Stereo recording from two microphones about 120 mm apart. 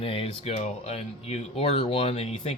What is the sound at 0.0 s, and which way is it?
Speech, 50° left (ahead or behind).